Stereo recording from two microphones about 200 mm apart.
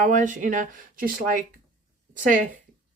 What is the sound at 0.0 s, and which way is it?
A woman's voice, 40° right (ahead or behind).